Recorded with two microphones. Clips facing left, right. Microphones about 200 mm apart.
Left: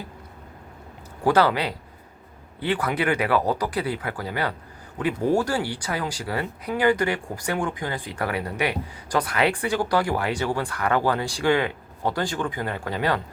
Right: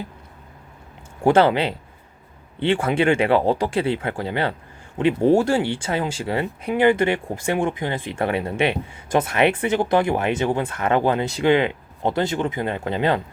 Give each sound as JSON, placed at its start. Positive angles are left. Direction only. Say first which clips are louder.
{"t": 1.2, "sound": "speech", "louder": "right 4 dB", "side_deg": -25}